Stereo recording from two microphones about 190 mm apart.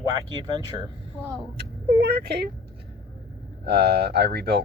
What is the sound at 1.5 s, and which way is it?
Speech, 60° right (ahead or behind).